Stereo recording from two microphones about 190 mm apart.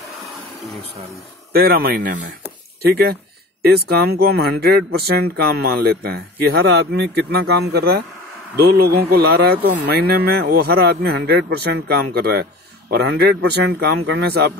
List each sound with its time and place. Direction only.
1.5 s speech: 55° right (ahead or behind)